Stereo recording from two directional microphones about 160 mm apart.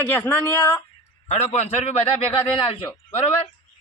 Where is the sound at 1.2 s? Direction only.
45° left (ahead or behind).